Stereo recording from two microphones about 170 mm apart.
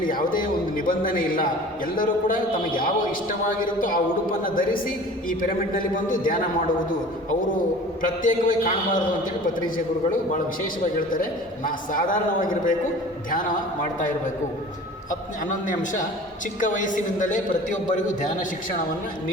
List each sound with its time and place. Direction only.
0.0 s a man's voice: 55° left (ahead or behind)
8.2 s a man's voice: 50° left (ahead or behind)
11.1 s a man's voice: 55° left (ahead or behind)
15.1 s a man's voice: 50° left (ahead or behind)